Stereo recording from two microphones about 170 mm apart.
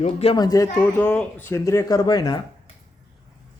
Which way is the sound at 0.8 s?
5° left (ahead or behind).